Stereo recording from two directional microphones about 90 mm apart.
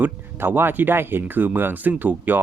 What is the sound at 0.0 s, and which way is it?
Speech, 25° right (ahead or behind).